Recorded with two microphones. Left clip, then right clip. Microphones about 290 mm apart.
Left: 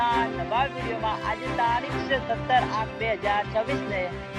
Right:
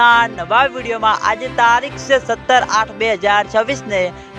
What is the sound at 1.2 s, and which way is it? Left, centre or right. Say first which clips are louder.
Speech: right 12 dB; right.